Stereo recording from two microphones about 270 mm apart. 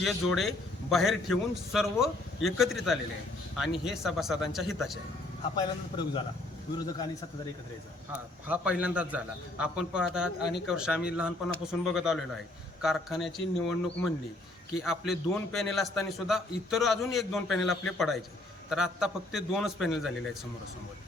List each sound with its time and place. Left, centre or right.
0.0 s a man's voice: centre
5.5 s a man's voice: centre
8.4 s a man's voice: centre